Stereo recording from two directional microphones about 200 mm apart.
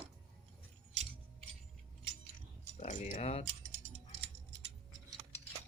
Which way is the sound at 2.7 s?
35° left (ahead or behind).